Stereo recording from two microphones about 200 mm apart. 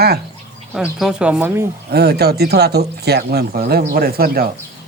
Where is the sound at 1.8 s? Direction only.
55° right (ahead or behind).